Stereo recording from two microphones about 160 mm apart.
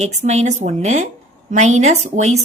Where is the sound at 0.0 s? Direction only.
45° right (ahead or behind).